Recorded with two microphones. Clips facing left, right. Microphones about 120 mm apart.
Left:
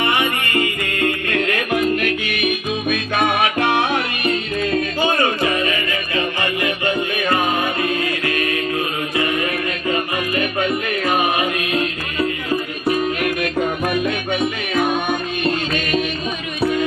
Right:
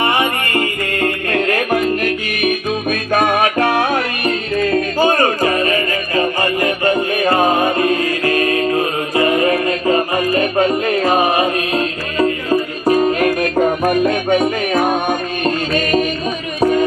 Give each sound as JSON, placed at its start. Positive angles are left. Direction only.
{"t": 0.0, "sound": "music", "side_deg": -35}